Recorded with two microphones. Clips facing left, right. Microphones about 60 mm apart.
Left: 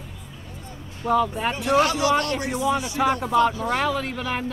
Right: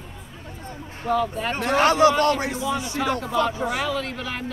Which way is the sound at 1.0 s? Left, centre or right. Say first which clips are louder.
Left 2 dB; centre.